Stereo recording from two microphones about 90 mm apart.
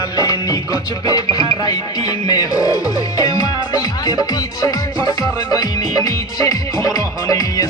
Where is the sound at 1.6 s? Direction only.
50° left (ahead or behind).